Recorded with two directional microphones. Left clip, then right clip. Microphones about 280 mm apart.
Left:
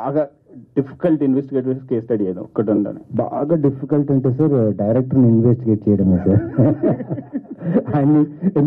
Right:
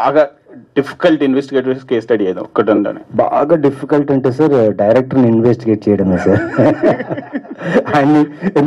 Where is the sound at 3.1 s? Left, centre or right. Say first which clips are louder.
Right 8 dB; centre.